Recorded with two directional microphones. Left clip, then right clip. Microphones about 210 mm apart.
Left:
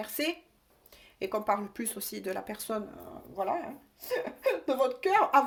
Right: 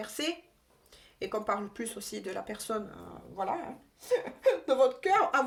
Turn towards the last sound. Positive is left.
turn(degrees=30)  # may be behind; listen again after turning